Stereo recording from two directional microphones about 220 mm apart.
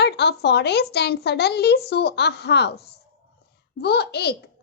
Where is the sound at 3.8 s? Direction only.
50° left (ahead or behind).